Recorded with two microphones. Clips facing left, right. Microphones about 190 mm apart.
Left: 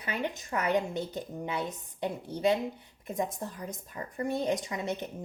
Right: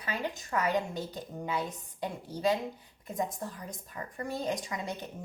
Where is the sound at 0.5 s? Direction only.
20° left (ahead or behind).